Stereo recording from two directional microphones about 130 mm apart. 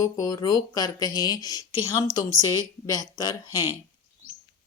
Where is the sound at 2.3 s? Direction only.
25° right (ahead or behind).